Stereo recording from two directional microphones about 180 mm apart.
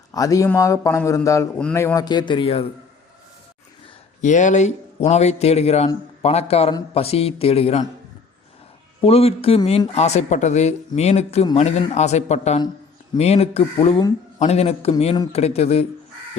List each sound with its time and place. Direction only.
0.1 s a man's voice: 20° left (ahead or behind)
4.2 s speech: 45° left (ahead or behind)
9.0 s speech: 30° left (ahead or behind)